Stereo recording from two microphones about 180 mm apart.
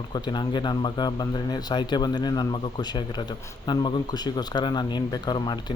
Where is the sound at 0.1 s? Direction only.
25° left (ahead or behind).